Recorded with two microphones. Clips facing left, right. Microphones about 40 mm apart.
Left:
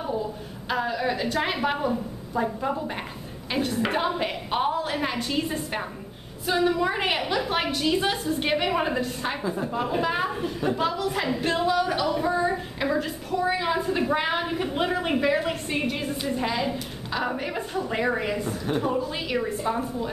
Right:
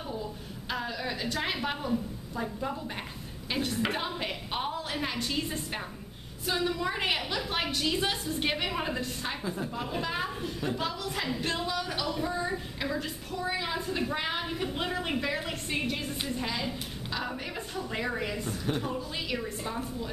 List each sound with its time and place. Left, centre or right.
0.2 s a woman's voice: centre